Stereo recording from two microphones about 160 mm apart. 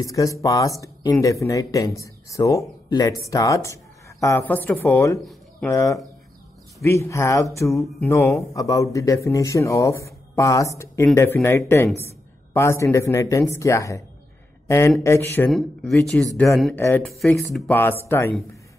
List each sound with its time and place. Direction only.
0.0 s speech: 20° left (ahead or behind)
5.2 s a sound: centre (ahead or behind)
5.7 s speech: 20° left (ahead or behind)
15.5 s speech: centre (ahead or behind)
17.1 s speech: centre (ahead or behind)
17.6 s speech: 10° left (ahead or behind)